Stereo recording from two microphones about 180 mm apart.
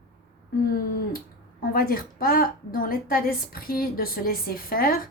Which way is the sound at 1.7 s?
55° left (ahead or behind).